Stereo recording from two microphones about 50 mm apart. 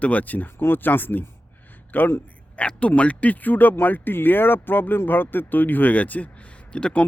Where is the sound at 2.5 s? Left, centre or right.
Left.